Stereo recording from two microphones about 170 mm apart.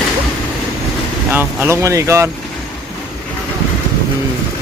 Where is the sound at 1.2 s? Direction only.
10° right (ahead or behind).